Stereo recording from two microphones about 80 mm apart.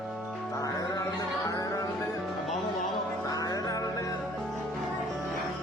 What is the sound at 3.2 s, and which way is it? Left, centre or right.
Music, left.